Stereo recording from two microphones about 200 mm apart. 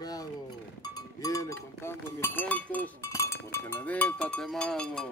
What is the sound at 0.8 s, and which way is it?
Speech, 20° left (ahead or behind).